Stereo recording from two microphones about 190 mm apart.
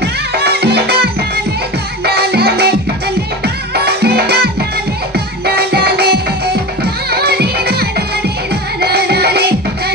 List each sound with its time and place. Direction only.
0.0 s music: 60° right (ahead or behind)
5.5 s music: 60° right (ahead or behind)